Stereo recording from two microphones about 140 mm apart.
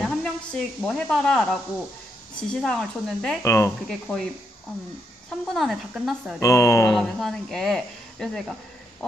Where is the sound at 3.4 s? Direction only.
20° left (ahead or behind).